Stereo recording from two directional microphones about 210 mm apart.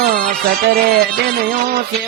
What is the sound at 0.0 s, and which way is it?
Music, 45° right (ahead or behind).